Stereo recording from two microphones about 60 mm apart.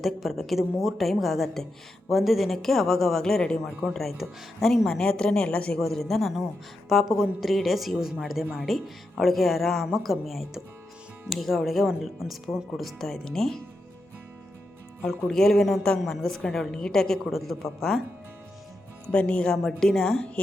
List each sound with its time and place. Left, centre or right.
0.0 s a woman's voice: centre
5.8 s speech: centre
15.3 s a woman's voice: centre
19.1 s speech: centre
19.6 s a woman's voice: centre